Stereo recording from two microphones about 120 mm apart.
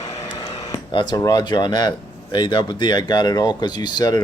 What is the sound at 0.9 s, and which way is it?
Speech, 35° left (ahead or behind).